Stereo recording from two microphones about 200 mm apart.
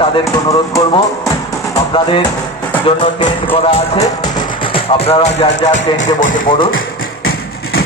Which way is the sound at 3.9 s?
15° left (ahead or behind).